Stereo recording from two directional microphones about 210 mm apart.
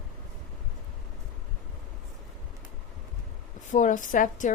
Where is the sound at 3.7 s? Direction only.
40° left (ahead or behind).